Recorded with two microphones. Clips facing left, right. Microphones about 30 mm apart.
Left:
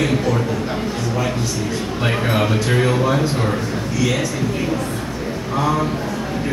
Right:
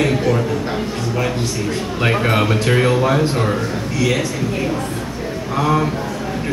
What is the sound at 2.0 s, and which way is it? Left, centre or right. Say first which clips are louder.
Speech: right 3 dB; centre.